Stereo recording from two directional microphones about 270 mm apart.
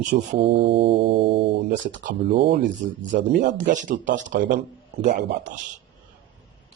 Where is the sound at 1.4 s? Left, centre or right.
Right.